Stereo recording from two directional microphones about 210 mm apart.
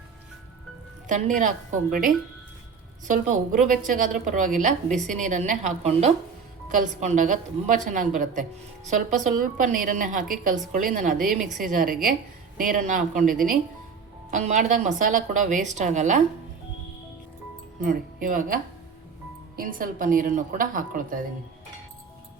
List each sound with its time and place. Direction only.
1.0 s a woman's voice: 35° right (ahead or behind)
17.8 s a woman's voice: 40° right (ahead or behind)